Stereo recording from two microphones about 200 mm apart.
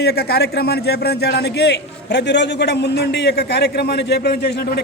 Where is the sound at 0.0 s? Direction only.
55° left (ahead or behind).